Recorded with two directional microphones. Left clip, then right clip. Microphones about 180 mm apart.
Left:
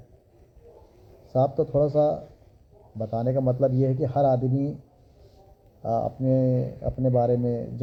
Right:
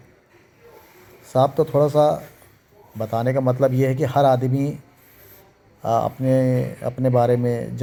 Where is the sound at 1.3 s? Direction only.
30° right (ahead or behind).